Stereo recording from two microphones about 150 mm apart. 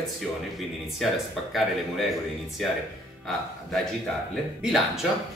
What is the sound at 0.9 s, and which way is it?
Speech, centre (ahead or behind).